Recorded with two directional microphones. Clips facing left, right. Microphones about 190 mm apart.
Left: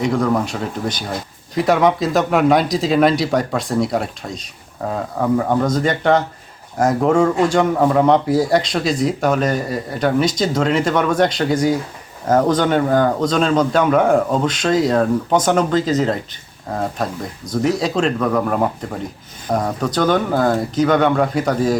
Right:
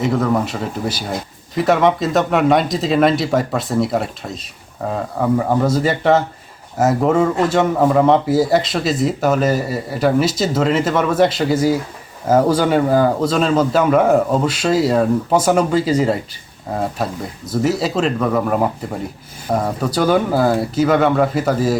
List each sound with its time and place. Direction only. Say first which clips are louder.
0.0 s a man's voice: even; 5° right (ahead or behind)